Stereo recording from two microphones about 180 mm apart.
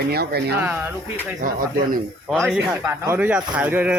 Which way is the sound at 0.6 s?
10° right (ahead or behind).